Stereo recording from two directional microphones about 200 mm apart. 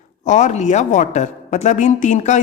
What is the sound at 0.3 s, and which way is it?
Speech, 35° left (ahead or behind).